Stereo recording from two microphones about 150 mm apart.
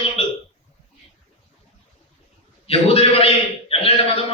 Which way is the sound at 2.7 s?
40° left (ahead or behind).